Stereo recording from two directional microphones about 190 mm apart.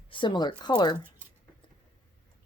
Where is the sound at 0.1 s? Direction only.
25° left (ahead or behind).